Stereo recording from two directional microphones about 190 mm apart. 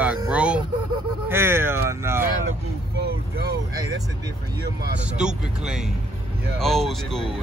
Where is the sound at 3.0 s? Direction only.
55° right (ahead or behind).